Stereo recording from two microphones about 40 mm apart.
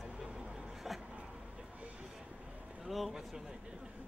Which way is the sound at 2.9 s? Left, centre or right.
Centre.